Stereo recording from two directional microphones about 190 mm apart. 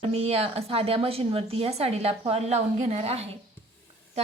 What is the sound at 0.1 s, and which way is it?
Speech, 30° right (ahead or behind).